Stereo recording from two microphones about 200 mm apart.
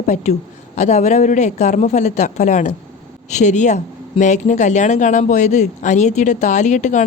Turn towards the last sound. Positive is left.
turn(degrees=35)  # may be behind; listen again after turning